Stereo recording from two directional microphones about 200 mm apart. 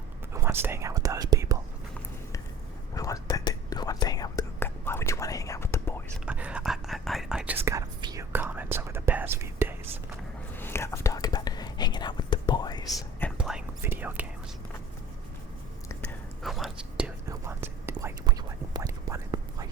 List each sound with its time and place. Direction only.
0.3 s speech: 10° right (ahead or behind)
2.9 s whispering: 15° left (ahead or behind)
6.1 s speech: 5° right (ahead or behind)
10.6 s whispering: 10° left (ahead or behind)
13.3 s whispering: 5° right (ahead or behind)
15.9 s whispering: 5° left (ahead or behind)
17.2 s whispering: 10° right (ahead or behind)